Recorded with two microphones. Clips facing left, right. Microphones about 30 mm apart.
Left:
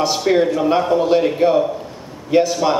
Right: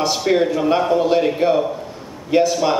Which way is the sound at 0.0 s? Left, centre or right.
Centre.